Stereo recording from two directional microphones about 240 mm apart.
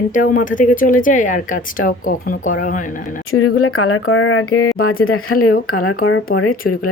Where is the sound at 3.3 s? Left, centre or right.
Left.